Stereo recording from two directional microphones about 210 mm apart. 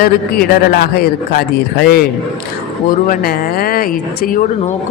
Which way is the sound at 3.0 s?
45° left (ahead or behind).